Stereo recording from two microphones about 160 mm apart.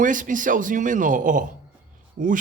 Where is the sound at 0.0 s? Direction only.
55° right (ahead or behind).